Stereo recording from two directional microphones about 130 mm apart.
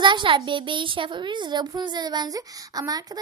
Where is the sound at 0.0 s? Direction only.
40° right (ahead or behind).